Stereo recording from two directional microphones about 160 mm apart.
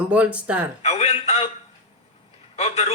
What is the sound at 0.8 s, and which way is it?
Speech, 40° left (ahead or behind).